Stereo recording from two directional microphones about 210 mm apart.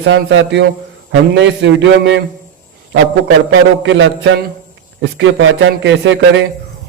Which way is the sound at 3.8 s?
60° right (ahead or behind).